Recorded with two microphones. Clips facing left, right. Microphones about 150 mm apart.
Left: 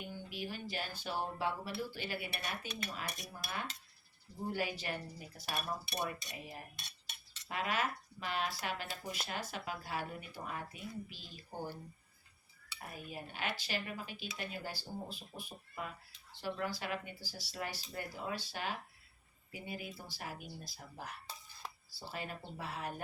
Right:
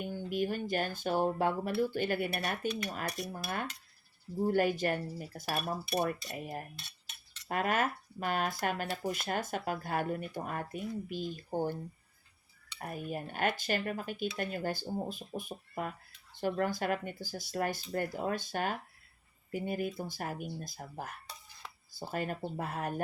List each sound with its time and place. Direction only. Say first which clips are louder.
0.3 s speech: right 13 dB; 50° right (ahead or behind)
4.5 s speech: right 9 dB; 50° right (ahead or behind)
12.8 s speech: right 8 dB; 50° right (ahead or behind)